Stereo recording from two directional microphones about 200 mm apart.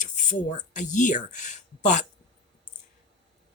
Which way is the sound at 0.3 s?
40° left (ahead or behind).